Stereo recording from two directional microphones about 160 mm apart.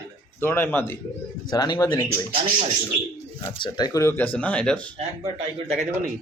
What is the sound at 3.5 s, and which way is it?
Speech, 30° left (ahead or behind).